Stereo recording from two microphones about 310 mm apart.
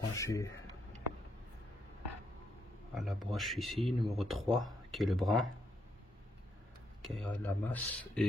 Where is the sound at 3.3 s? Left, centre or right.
Centre.